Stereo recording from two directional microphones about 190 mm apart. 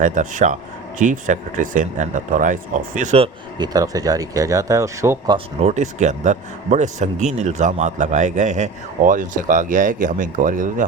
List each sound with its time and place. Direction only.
0.0 s speech: 40° right (ahead or behind)
3.6 s speech: 20° right (ahead or behind)
5.6 s speech: 40° right (ahead or behind)